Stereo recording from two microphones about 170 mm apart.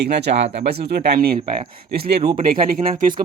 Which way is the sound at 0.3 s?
40° right (ahead or behind).